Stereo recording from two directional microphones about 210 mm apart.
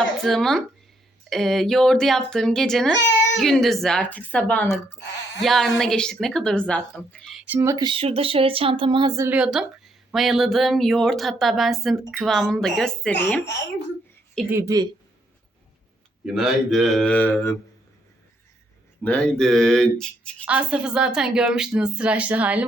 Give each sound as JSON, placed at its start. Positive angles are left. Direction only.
{"t": 0.2, "sound": "a woman's voice", "side_deg": 0}
{"t": 14.5, "sound": "speech", "side_deg": -15}
{"t": 16.2, "sound": "a woman's voice", "side_deg": 0}
{"t": 19.0, "sound": "a woman's voice", "side_deg": 5}